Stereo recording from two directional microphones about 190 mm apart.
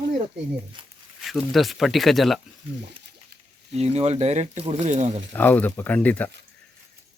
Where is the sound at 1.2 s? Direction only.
Centre (ahead or behind).